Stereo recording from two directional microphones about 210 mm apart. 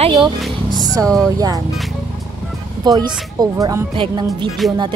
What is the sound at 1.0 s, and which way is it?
Speech, 5° left (ahead or behind).